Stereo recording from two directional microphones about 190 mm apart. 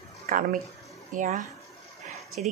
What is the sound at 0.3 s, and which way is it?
Speech, 45° right (ahead or behind).